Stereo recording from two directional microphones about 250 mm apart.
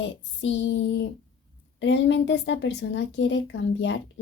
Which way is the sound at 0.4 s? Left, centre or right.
Left.